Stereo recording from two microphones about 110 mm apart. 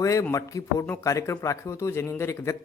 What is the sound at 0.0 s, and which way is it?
A man's voice, 30° left (ahead or behind).